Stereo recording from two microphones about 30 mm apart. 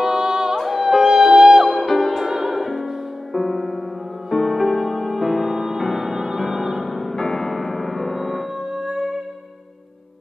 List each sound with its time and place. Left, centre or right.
0.2 s music: right
0.6 s music: centre
1.7 s music: centre
8.7 s music: centre